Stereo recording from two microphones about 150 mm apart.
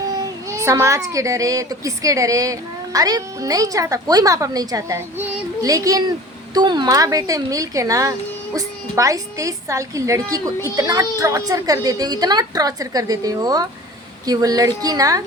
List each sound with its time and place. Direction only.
0.1 s a child's voice: 20° right (ahead or behind)